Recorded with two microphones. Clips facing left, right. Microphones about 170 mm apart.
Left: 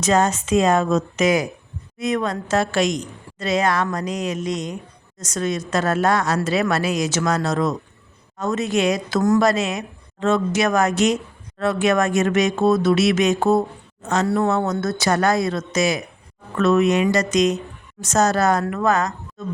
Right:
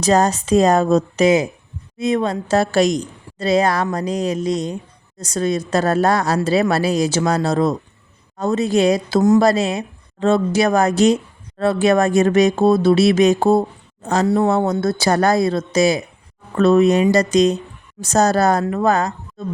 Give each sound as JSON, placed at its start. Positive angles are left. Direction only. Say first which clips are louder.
{"t": 0.0, "sound": "speech", "louder": "right 3 dB", "side_deg": -35}